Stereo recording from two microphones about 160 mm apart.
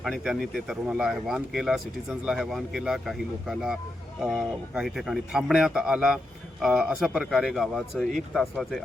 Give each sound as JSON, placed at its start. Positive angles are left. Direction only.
{"t": 0.0, "sound": "speech", "side_deg": -5}